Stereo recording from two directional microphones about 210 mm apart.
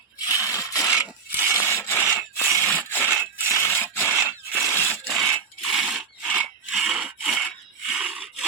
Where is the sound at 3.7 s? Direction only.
10° left (ahead or behind).